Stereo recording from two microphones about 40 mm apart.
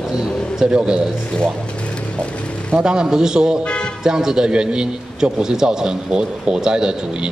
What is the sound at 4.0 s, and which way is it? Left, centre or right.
A man's voice, centre.